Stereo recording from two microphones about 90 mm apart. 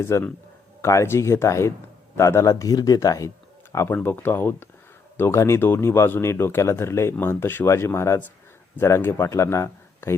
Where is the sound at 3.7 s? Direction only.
25° left (ahead or behind).